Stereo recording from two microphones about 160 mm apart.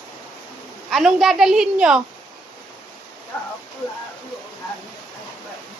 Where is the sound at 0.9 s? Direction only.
Centre (ahead or behind).